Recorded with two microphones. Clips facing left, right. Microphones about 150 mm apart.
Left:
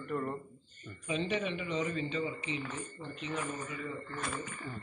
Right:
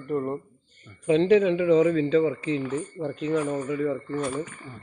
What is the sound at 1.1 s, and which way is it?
A man's voice, 90° right.